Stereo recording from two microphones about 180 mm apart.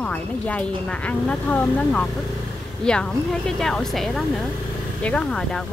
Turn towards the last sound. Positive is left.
turn(degrees=5)  # may be behind; listen again after turning